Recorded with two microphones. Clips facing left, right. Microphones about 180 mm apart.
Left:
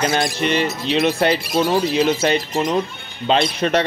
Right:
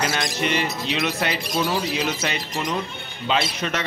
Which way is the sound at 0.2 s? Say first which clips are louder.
Left 5 dB; 35° left (ahead or behind).